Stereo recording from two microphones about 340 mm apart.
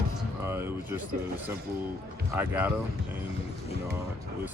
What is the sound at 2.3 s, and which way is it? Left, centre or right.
Speech, centre.